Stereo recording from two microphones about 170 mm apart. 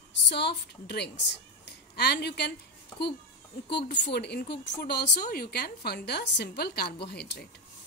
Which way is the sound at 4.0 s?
75° left (ahead or behind).